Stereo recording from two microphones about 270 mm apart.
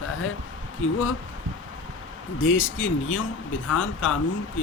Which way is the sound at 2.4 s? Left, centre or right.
Left.